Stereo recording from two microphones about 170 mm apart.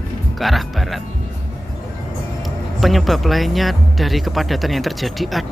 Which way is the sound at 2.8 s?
Centre (ahead or behind).